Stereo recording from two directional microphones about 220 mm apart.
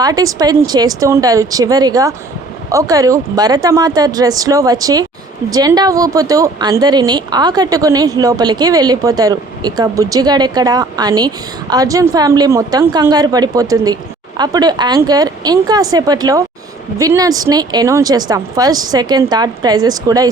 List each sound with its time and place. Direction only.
0.0 s speech: 15° right (ahead or behind)